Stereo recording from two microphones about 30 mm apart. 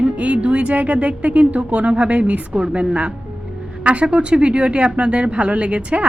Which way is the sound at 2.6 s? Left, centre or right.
Right.